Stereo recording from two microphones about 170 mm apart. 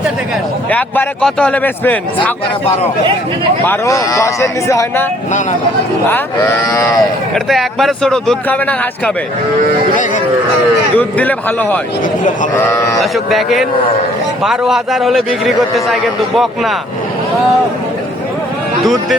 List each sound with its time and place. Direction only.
0.7 s a man's voice: 10° left (ahead or behind)
3.7 s speech: 20° left (ahead or behind)
6.1 s a man's voice: 15° left (ahead or behind)
7.3 s a man's voice: centre (ahead or behind)
10.9 s a man's voice: 10° left (ahead or behind)
13.0 s a man's voice: centre (ahead or behind)